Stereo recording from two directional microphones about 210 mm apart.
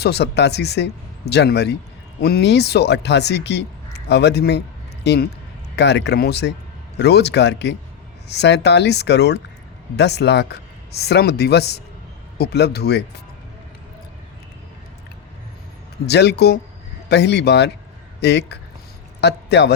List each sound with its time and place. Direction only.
0.0 s speech: 50° left (ahead or behind)
16.0 s a man's voice: 50° left (ahead or behind)